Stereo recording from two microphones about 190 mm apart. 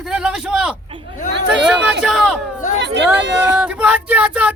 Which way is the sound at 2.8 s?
70° right (ahead or behind).